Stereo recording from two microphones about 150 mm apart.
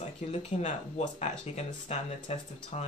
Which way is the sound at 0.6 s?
50° left (ahead or behind).